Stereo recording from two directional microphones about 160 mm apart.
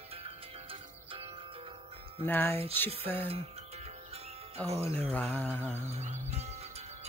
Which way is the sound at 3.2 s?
40° right (ahead or behind).